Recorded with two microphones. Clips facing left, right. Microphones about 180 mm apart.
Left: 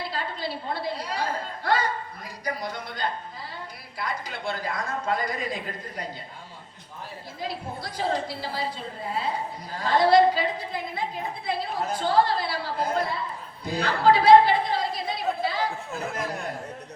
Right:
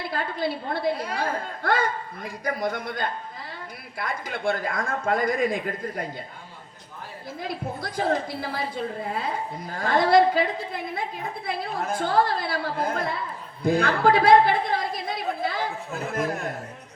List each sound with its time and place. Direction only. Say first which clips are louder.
0.1 s a woman's voice: right 4 dB; 55° right (ahead or behind)
7.4 s a woman's voice: right 1 dB; 50° right (ahead or behind)
15.9 s speech: right 3 dB; centre (ahead or behind)